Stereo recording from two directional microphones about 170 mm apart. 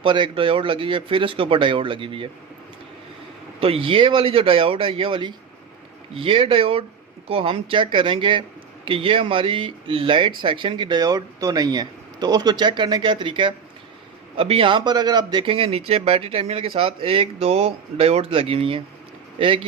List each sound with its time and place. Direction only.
0.0 s speech: 30° right (ahead or behind)
3.6 s speech: 35° right (ahead or behind)